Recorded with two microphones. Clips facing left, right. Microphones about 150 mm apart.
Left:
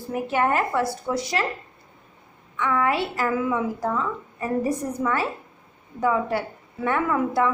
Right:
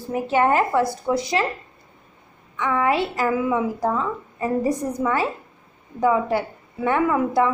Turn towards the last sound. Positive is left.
turn(degrees=-15)  # may be behind; listen again after turning